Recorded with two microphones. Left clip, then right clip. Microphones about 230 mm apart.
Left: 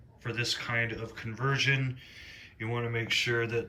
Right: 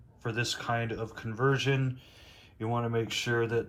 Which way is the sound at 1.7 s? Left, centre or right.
Right.